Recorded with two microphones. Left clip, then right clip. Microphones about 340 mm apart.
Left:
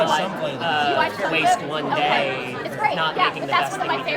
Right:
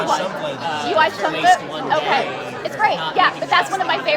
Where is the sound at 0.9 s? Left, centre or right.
Right.